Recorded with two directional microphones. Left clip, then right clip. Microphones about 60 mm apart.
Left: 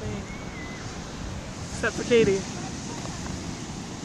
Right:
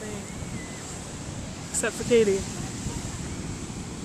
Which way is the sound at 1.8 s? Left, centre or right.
Right.